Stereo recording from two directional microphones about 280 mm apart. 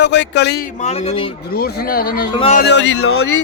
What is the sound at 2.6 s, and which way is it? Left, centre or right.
Speech, left.